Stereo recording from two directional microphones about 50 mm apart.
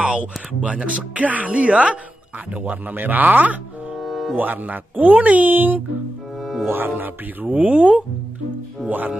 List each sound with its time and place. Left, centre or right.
0.0 s speech: right
4.0 s music: centre
4.4 s speech: right
6.4 s music: centre
6.7 s speech: right